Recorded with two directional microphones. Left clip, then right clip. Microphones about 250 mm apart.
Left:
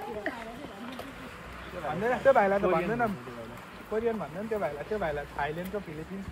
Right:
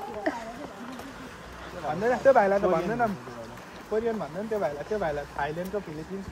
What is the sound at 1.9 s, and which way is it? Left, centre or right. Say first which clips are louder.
Speech: right 3 dB; right.